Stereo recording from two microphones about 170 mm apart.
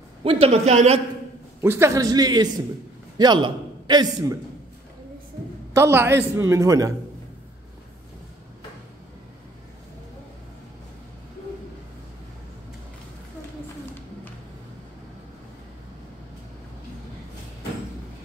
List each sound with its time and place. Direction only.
0.2 s a man's voice: 35° right (ahead or behind)
1.6 s a man's voice: 15° right (ahead or behind)
5.7 s a man's voice: 15° right (ahead or behind)